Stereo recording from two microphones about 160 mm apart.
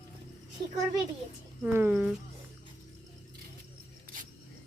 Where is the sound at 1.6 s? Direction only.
10° right (ahead or behind).